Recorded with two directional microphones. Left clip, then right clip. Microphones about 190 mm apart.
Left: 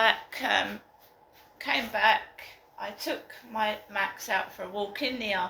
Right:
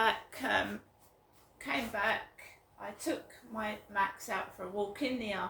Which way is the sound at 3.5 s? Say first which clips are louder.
Left 5 dB; 20° right (ahead or behind).